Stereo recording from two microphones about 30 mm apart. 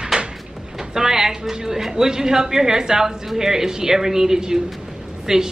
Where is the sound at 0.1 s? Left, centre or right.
Right.